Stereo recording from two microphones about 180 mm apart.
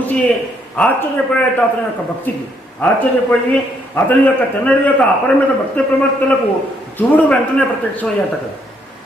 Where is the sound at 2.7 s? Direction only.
10° left (ahead or behind).